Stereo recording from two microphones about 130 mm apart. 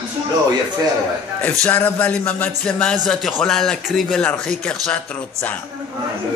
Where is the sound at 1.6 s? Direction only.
10° left (ahead or behind).